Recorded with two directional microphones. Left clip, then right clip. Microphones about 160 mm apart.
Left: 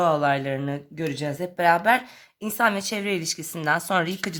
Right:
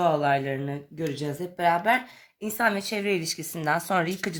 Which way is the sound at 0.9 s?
50° left (ahead or behind).